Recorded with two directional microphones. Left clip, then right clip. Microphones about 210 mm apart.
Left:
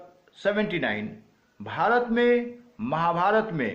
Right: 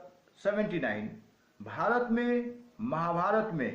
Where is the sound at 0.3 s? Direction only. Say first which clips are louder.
Left 5 dB; 45° left (ahead or behind).